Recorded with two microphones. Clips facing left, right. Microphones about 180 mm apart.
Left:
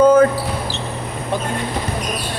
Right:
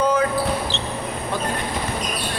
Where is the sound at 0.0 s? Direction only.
45° left (ahead or behind).